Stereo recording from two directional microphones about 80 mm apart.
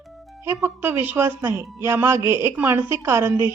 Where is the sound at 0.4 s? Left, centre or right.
Right.